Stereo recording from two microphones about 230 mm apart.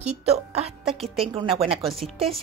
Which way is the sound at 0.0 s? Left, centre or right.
Right.